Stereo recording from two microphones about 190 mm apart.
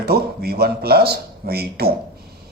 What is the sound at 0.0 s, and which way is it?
Speech, 55° right (ahead or behind).